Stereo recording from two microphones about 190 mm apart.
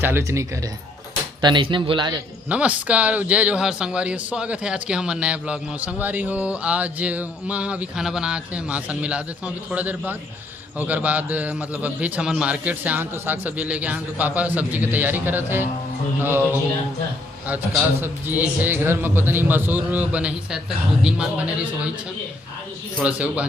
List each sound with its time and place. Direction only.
0.0 s a man's voice: 15° right (ahead or behind)
2.5 s a man's voice: 5° right (ahead or behind)
18.0 s a man's voice: 10° right (ahead or behind)
23.0 s a man's voice: 5° right (ahead or behind)